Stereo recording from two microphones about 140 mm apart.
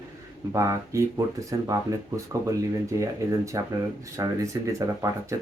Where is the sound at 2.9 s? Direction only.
20° right (ahead or behind).